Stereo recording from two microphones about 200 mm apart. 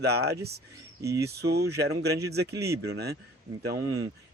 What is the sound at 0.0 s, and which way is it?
Speech, 55° right (ahead or behind).